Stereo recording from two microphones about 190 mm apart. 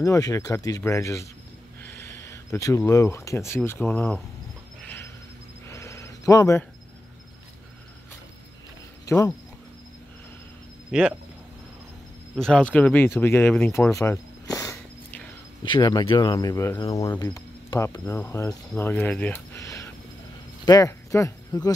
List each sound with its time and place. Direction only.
0.0 s speech: 15° left (ahead or behind)
1.8 s a sound: 10° left (ahead or behind)
3.3 s speech: 15° left (ahead or behind)
4.8 s a sound: 10° left (ahead or behind)
9.0 s speech: 15° left (ahead or behind)
10.9 s speech: 5° right (ahead or behind)
12.4 s speech: 5° left (ahead or behind)